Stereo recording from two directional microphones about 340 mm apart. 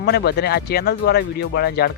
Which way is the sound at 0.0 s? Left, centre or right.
Left.